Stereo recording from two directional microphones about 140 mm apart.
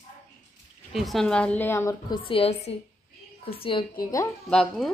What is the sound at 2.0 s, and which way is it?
A woman's voice, 35° left (ahead or behind).